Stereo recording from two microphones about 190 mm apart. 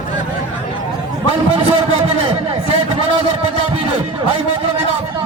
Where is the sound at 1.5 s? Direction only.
30° right (ahead or behind).